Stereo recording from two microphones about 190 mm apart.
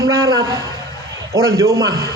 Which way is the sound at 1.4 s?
15° right (ahead or behind).